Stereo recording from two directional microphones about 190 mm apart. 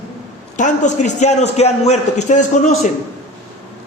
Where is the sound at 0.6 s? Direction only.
40° left (ahead or behind).